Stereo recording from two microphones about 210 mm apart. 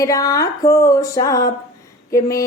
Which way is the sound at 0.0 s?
15° left (ahead or behind).